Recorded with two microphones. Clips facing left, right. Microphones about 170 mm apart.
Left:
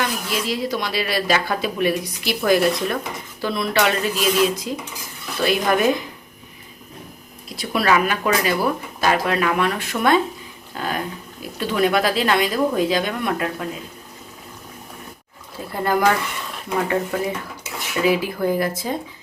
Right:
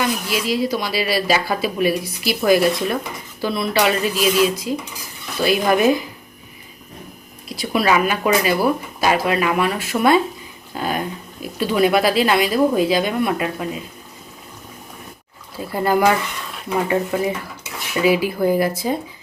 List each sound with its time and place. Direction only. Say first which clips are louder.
0.0 s speech: right 3 dB; 5° right (ahead or behind)
7.5 s speech: right 1 dB; centre (ahead or behind)
10.8 s a sound: right 3 dB; 10° right (ahead or behind)
11.6 s speech: right 3 dB; 10° right (ahead or behind)
15.7 s speech: right 2 dB; 10° right (ahead or behind)